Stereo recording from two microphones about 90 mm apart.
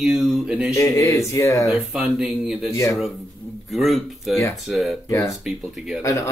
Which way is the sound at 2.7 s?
35° left (ahead or behind).